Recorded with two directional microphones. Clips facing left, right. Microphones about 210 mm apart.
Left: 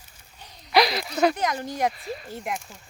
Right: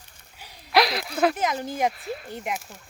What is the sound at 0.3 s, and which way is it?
Speech, 5° right (ahead or behind).